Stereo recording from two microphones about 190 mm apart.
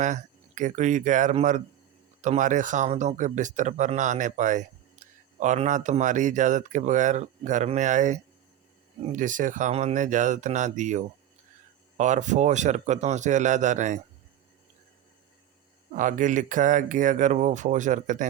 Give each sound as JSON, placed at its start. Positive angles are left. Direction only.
{"t": 0.0, "sound": "speech", "side_deg": -40}
{"t": 15.9, "sound": "speech", "side_deg": -45}